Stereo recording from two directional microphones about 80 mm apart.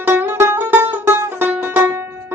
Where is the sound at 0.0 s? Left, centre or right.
Right.